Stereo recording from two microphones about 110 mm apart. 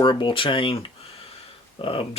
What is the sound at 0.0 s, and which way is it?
Speech, 50° left (ahead or behind).